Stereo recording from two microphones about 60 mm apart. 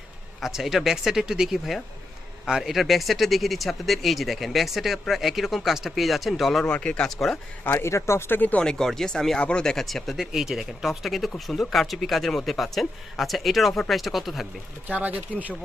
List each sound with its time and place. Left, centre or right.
0.4 s speech: centre
6.7 s speech: centre
7.1 s speech: centre
7.6 s speech: left
8.4 s speech: left
8.6 s speech: centre
14.8 s speech: right